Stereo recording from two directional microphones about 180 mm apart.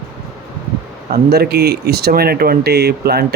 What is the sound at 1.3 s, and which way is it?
Speech, 60° right (ahead or behind).